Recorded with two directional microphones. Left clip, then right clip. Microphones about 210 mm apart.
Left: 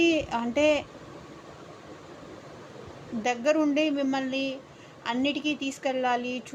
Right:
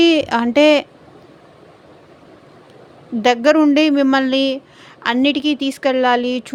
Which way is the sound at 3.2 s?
55° right (ahead or behind).